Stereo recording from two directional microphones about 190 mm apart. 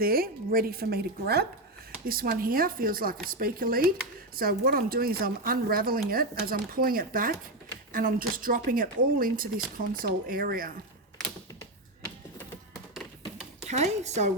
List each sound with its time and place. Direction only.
0.0 s speech: 50° right (ahead or behind)
13.7 s speech: 35° right (ahead or behind)